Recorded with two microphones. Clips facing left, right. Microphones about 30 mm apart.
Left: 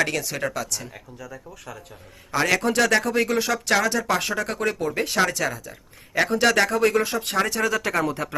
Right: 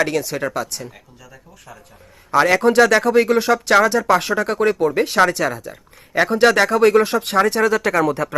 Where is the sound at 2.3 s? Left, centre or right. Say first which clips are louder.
Right 7 dB; right.